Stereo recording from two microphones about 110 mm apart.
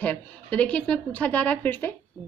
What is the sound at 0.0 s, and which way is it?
A woman's voice, 10° left (ahead or behind).